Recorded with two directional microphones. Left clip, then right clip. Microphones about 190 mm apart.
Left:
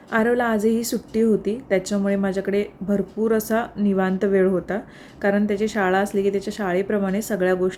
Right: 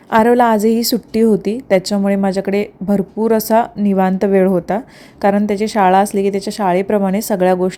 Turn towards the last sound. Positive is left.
turn(degrees=-30)  # may be behind; listen again after turning